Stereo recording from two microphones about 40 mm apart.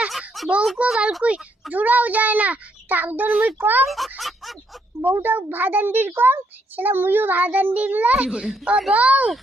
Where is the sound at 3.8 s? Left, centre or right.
Centre.